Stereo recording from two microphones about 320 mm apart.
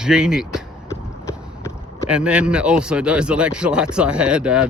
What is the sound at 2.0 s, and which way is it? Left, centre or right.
Speech, centre.